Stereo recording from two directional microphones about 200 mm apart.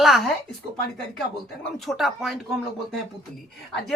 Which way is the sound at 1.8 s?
Centre (ahead or behind).